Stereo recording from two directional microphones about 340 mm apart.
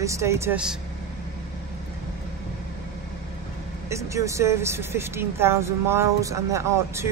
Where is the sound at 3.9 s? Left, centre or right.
Centre.